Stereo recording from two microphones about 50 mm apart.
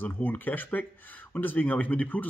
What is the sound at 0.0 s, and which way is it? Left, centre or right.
Speech, left.